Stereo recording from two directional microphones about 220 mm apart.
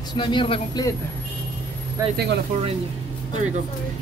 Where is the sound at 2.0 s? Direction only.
15° right (ahead or behind).